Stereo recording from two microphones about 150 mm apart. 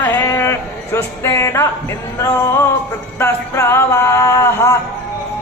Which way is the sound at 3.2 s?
15° left (ahead or behind).